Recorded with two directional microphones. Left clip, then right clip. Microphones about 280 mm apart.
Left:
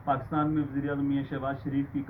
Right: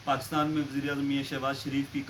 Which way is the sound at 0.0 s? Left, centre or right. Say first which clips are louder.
Even; centre.